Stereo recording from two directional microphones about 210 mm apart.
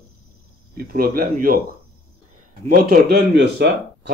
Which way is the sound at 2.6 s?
45° right (ahead or behind).